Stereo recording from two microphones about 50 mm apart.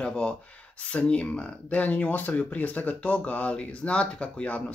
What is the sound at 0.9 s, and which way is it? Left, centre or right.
Speech, left.